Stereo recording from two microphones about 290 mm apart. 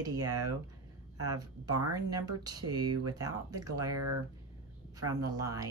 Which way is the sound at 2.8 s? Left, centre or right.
Right.